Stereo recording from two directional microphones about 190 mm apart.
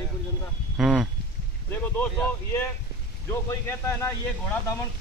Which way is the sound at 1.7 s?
10° left (ahead or behind).